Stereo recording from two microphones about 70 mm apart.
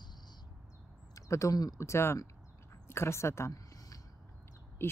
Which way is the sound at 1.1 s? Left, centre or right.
Left.